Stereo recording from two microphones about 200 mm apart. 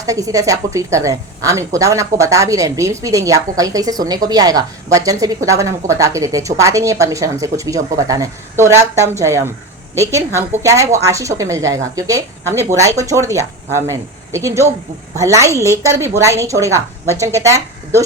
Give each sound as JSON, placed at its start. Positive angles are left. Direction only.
{"t": 0.0, "sound": "a woman's voice", "side_deg": -15}